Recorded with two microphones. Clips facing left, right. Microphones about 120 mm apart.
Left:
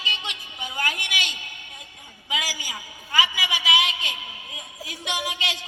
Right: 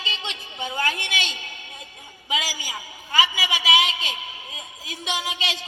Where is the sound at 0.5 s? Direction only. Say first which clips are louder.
Right 4 dB; 25° right (ahead or behind).